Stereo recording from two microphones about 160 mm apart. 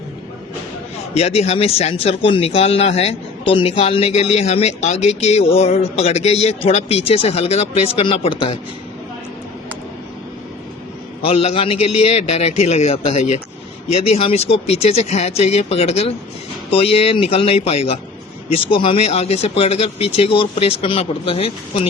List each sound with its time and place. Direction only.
1.1 s speech: 40° left (ahead or behind)
11.2 s speech: 35° left (ahead or behind)